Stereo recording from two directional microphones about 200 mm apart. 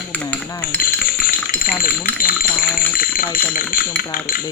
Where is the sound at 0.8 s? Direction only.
45° left (ahead or behind).